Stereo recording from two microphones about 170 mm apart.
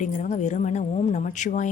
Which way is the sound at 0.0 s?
45° left (ahead or behind).